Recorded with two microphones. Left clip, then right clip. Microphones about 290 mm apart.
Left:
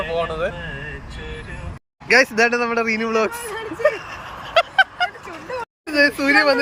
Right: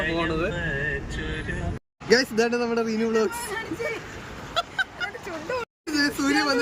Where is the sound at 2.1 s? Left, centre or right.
Centre.